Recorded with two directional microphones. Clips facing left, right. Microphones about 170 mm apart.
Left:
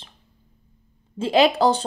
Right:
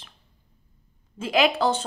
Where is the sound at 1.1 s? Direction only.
30° left (ahead or behind).